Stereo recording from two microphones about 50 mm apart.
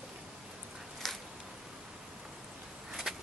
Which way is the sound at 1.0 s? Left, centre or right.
Centre.